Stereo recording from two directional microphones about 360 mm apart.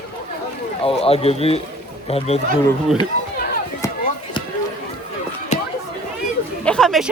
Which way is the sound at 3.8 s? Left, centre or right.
Centre.